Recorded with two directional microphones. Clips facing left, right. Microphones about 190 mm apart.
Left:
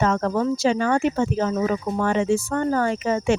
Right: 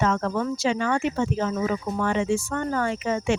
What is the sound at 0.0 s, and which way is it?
Speech, 40° left (ahead or behind).